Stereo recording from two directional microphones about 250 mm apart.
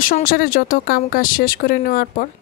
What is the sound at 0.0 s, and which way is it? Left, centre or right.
Speech, left.